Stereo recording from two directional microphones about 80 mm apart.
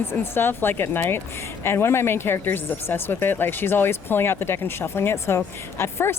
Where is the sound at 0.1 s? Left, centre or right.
Left.